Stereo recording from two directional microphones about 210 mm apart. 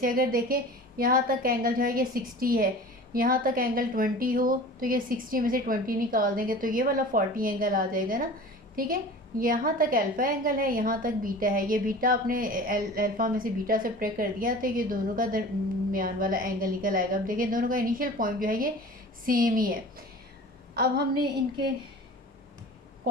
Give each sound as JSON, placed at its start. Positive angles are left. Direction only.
{"t": 0.0, "sound": "a woman's voice", "side_deg": -40}